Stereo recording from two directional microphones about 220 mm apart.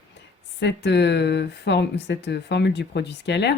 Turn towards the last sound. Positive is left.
turn(degrees=50)  # may be behind; listen again after turning